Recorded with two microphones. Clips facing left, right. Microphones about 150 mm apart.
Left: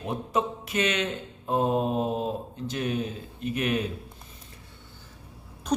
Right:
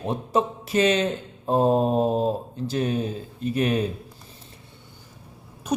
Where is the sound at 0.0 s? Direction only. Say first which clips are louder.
Right 4 dB; 30° right (ahead or behind).